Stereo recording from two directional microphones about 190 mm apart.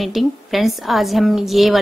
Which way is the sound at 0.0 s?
Centre (ahead or behind).